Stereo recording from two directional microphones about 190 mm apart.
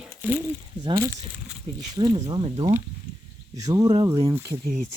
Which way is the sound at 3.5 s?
20° right (ahead or behind).